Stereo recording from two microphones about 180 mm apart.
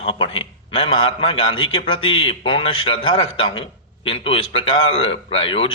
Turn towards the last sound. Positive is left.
turn(degrees=30)  # may be behind; listen again after turning